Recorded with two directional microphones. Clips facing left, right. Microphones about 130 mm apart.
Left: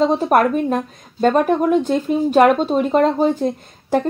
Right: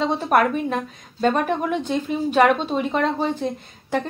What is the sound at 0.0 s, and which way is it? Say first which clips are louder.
A woman's voice: left 4 dB; 40° left (ahead or behind).